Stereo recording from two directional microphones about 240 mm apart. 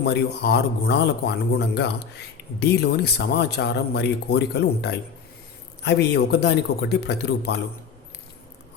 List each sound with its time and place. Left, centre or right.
0.0 s speech: left